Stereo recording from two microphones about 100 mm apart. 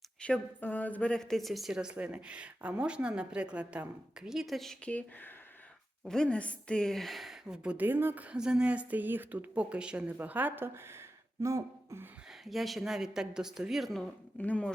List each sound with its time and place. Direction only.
0.2 s a woman's voice: 15° left (ahead or behind)
7.4 s speech: 10° right (ahead or behind)
11.3 s speech: 30° right (ahead or behind)
12.5 s speech: centre (ahead or behind)
14.3 s a woman's voice: 15° left (ahead or behind)